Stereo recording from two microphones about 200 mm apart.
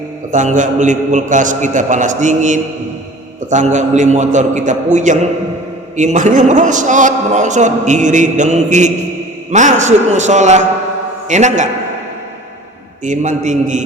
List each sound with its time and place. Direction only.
0.3 s a man's voice: 40° right (ahead or behind)
13.1 s a man's voice: 35° right (ahead or behind)